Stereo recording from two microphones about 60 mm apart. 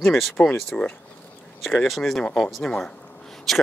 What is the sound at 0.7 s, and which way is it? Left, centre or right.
Speech, centre.